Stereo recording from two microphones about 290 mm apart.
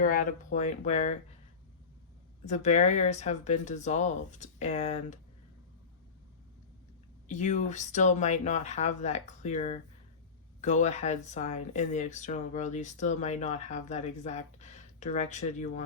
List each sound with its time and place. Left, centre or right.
0.0 s speech: left
2.4 s speech: left
7.3 s speech: left